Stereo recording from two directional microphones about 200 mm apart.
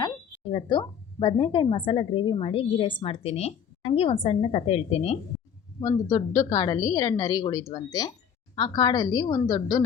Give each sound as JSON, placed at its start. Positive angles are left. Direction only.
{"t": 0.4, "sound": "a woman's voice", "side_deg": 25}
{"t": 5.8, "sound": "a woman's voice", "side_deg": 15}